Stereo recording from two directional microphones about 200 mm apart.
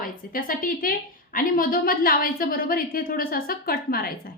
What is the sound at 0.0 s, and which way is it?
A woman's voice, 45° left (ahead or behind).